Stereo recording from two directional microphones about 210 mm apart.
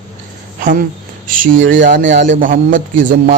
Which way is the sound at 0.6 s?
40° right (ahead or behind).